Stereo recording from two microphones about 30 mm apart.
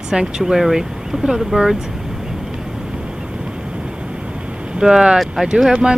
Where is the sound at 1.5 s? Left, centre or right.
Right.